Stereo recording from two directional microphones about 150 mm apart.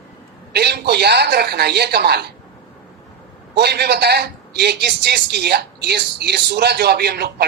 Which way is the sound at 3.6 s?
90° right.